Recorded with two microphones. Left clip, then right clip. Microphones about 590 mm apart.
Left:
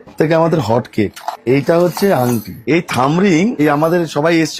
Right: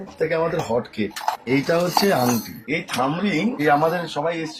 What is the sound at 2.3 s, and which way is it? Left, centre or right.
A man's voice, left.